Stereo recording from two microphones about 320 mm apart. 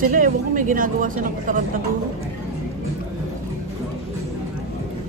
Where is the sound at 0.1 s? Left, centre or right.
Right.